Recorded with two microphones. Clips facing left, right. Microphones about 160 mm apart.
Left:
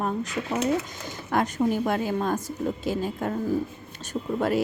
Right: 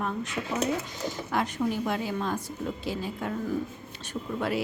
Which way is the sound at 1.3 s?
50° left (ahead or behind).